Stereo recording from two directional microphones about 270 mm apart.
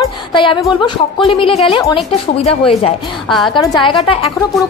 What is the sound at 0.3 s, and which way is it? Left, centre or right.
A woman's voice, centre.